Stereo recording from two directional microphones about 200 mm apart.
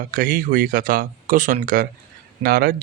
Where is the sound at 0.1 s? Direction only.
45° right (ahead or behind).